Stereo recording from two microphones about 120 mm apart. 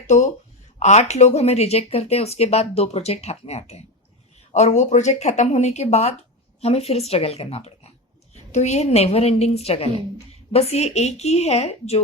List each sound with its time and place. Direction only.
0.1 s speech: 75° left (ahead or behind)
4.5 s speech: 75° left (ahead or behind); by 7.7 s 55° left (ahead or behind)
8.5 s speech: 70° left (ahead or behind)